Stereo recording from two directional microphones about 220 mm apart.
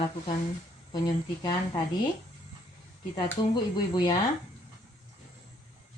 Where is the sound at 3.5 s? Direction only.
20° left (ahead or behind).